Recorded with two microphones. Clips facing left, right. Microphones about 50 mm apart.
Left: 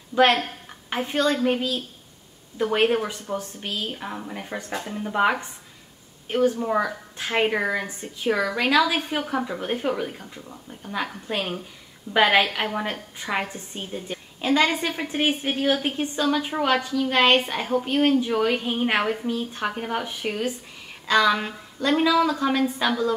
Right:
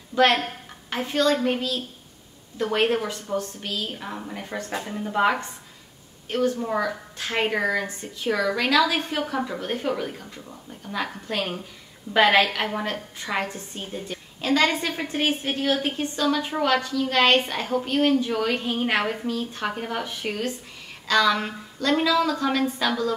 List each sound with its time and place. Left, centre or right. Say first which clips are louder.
0.1 s a woman's voice: left 1 dB; centre
1.3 s a woman's voice: left 1 dB; centre
5.1 s a woman's voice: even; centre